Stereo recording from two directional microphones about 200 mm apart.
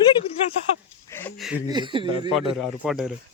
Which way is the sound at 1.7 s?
25° right (ahead or behind).